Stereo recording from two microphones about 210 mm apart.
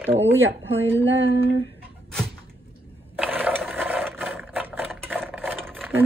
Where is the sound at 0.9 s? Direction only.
60° right (ahead or behind).